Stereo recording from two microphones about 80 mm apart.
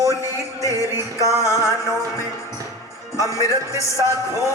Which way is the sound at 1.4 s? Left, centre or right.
Left.